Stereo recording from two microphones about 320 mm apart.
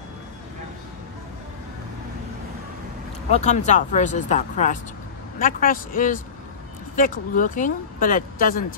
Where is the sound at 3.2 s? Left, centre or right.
Left.